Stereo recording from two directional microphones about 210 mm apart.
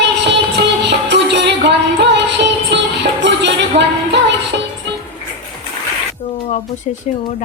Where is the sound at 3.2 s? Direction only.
55° right (ahead or behind).